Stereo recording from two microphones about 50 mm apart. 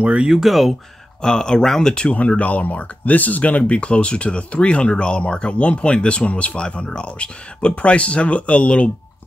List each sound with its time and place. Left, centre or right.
0.0 s speech: right
0.3 s speech: centre
1.2 s speech: centre
2.0 s speech: left